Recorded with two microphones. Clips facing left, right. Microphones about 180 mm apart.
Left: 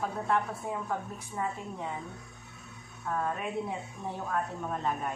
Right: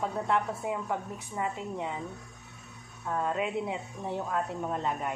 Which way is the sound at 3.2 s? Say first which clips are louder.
Right 5 dB; 20° right (ahead or behind).